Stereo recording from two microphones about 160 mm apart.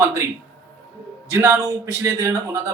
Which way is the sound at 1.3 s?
15° right (ahead or behind).